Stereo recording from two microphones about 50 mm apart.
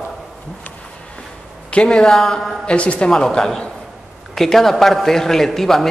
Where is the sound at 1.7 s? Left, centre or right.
Centre.